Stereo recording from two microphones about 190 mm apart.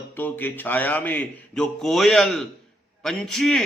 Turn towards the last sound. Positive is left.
turn(degrees=0)  # may be behind; listen again after turning